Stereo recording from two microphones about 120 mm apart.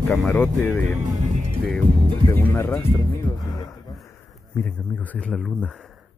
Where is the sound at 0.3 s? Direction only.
15° left (ahead or behind).